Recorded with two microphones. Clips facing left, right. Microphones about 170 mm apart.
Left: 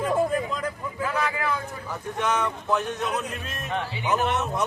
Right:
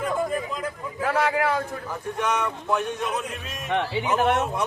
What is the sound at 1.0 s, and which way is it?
Vehicle, 75° right (ahead or behind).